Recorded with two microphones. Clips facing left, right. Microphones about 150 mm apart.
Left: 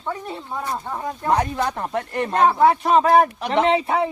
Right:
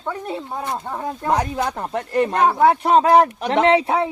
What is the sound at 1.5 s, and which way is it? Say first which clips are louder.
Speech: even; 10° right (ahead or behind).